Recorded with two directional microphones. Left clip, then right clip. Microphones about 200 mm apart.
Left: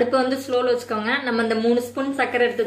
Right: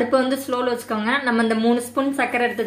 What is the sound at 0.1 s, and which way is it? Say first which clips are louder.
A woman's voice: even; 45° right (ahead or behind).